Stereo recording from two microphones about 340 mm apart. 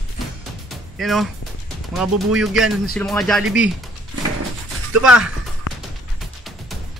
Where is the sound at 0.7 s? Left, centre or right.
Centre.